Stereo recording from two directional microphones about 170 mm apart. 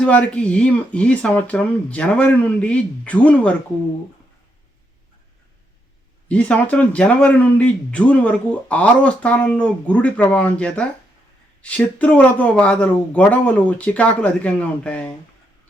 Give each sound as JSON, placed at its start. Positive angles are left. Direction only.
{"t": 0.0, "sound": "a man's voice", "side_deg": 10}
{"t": 6.2, "sound": "a man's voice", "side_deg": 5}